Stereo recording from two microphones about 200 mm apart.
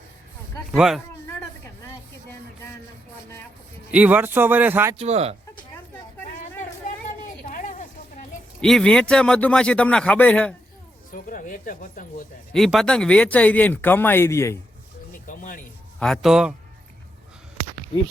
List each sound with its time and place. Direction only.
0.7 s a man's voice: centre (ahead or behind)
3.9 s speech: 5° right (ahead or behind)
4.9 s speech: 30° right (ahead or behind)
7.4 s a sound: 40° left (ahead or behind)
8.6 s a man's voice: 5° left (ahead or behind)
11.1 s speech: 40° left (ahead or behind)
12.5 s speech: centre (ahead or behind)
15.3 s music: 40° left (ahead or behind)
16.0 s a man's voice: centre (ahead or behind)